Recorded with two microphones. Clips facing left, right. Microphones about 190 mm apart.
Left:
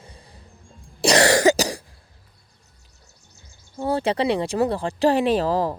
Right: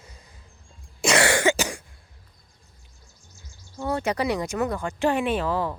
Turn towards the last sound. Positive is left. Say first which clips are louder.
# left 5 dB
turn(degrees=35)  # may be behind; listen again after turning